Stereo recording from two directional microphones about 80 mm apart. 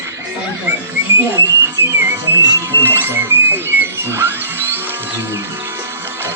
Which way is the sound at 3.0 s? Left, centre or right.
Right.